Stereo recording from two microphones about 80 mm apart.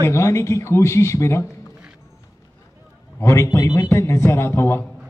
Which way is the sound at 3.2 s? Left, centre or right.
Left.